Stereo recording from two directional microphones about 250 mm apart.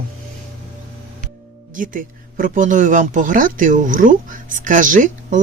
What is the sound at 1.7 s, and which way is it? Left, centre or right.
Speech, right.